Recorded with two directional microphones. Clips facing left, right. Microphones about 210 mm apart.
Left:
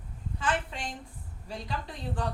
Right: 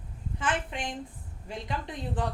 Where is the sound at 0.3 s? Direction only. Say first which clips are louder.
Even; 20° right (ahead or behind).